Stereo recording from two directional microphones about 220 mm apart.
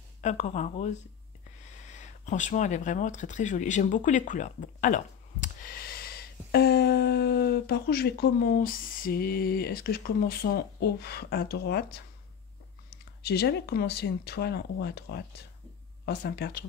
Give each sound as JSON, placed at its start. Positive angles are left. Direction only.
{"t": 0.2, "sound": "speech", "side_deg": 30}
{"t": 13.2, "sound": "speech", "side_deg": 45}